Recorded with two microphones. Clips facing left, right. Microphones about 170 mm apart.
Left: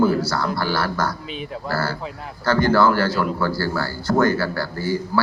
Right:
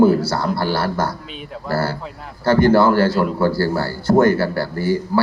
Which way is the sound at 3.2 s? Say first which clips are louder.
Right 4 dB; 25° right (ahead or behind).